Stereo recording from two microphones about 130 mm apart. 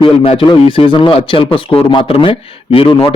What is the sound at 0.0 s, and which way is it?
A man's voice, 45° left (ahead or behind).